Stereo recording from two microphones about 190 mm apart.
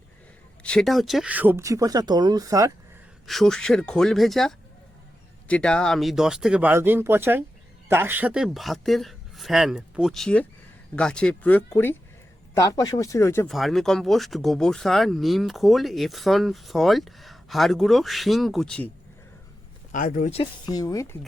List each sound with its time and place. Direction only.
0.6 s speech: 5° left (ahead or behind); by 2.7 s 20° right (ahead or behind)
3.2 s speech: centre (ahead or behind)
13.5 s speech: centre (ahead or behind)
19.9 s speech: 45° left (ahead or behind)
20.4 s speech: 20° left (ahead or behind)